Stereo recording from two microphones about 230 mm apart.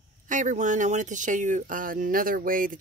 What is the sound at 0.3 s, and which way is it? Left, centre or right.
Speech, right.